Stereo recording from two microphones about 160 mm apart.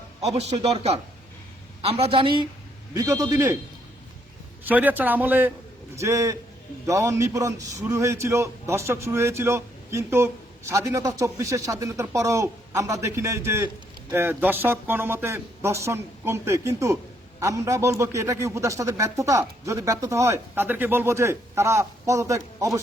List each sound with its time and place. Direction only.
0.2 s a man's voice: 40° right (ahead or behind)
2.0 s a man's voice: 35° right (ahead or behind)
2.9 s a man's voice: 20° right (ahead or behind)
4.6 s a man's voice: 10° right (ahead or behind)